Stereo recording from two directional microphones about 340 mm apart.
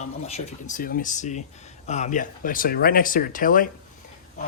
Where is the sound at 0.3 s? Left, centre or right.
Centre.